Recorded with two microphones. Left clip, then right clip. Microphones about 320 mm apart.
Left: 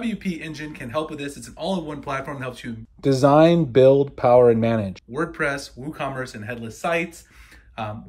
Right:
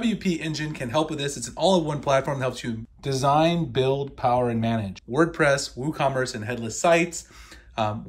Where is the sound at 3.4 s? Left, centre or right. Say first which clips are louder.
Left 8 dB; left.